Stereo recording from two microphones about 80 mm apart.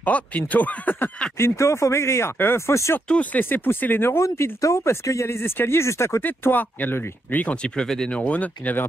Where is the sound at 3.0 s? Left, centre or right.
Centre; by 6.2 s left.